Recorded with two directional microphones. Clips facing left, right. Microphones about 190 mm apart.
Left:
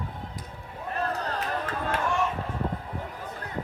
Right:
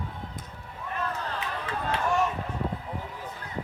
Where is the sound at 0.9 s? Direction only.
40° left (ahead or behind).